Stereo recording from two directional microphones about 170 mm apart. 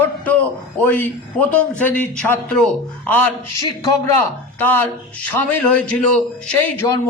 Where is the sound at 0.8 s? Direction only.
10° left (ahead or behind).